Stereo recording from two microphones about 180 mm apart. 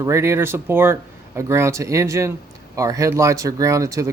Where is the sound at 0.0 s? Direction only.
15° right (ahead or behind).